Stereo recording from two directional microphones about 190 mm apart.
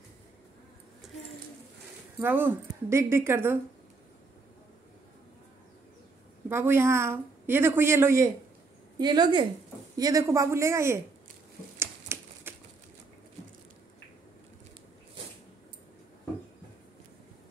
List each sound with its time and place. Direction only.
2.1 s a woman's voice: 10° right (ahead or behind)
6.5 s a woman's voice: 10° right (ahead or behind)
11.8 s typewriter: 10° right (ahead or behind)